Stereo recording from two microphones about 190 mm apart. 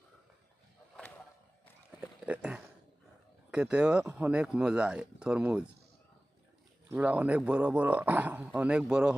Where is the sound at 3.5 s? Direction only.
5° right (ahead or behind).